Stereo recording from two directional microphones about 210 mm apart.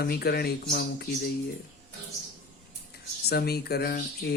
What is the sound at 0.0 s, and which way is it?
Speech, 50° left (ahead or behind).